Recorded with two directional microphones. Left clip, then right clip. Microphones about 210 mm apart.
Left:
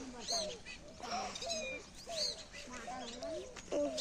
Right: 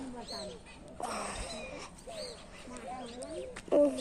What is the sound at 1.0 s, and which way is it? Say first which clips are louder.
Cat: right 3 dB; 15° right (ahead or behind).